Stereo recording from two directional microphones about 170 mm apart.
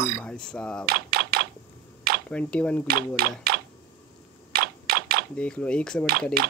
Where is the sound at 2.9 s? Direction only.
65° right (ahead or behind).